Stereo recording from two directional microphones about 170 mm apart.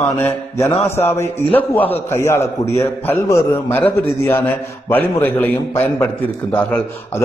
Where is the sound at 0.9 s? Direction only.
15° left (ahead or behind).